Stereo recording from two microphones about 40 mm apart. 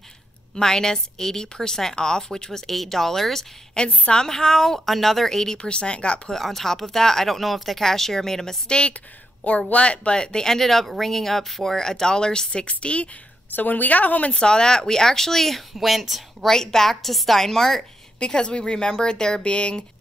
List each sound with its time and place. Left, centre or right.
0.6 s a woman's voice: centre
3.8 s a woman's voice: centre
5.6 s speech: left
6.3 s a woman's voice: centre
8.6 s a woman's voice: left
12.6 s speech: left
13.6 s a woman's voice: left
14.4 s a woman's voice: centre
15.7 s a woman's voice: centre
16.4 s a woman's voice: centre
18.2 s speech: left